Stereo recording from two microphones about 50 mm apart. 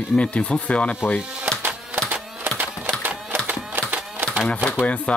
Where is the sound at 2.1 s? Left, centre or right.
Right.